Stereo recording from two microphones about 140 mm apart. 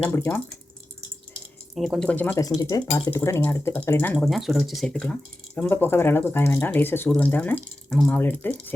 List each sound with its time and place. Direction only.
0.0 s speech: 15° left (ahead or behind)
1.7 s speech: centre (ahead or behind)
2.6 s speech: 25° left (ahead or behind)
4.2 s speech: centre (ahead or behind)
7.9 s speech: centre (ahead or behind)
8.1 s speech: 15° left (ahead or behind)